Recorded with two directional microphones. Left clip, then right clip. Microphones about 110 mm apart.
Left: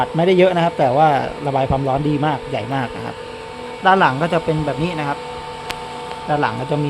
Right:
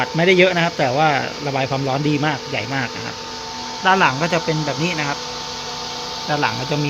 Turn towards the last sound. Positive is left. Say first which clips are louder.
# left 1 dB
turn(degrees=5)  # may be behind; listen again after turning